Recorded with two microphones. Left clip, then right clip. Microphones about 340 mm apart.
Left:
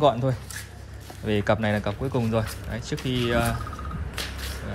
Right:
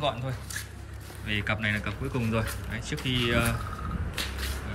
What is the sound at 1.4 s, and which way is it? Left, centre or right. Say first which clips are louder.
Speech: left 5 dB; centre.